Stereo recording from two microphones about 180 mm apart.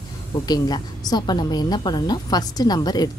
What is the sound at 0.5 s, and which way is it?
A woman's voice, 20° left (ahead or behind).